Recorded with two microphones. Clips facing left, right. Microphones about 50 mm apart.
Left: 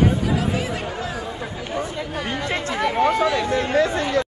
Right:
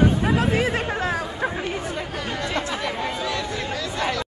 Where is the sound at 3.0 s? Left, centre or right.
Left.